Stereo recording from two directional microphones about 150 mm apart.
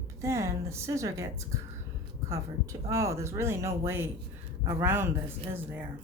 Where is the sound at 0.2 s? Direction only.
20° right (ahead or behind).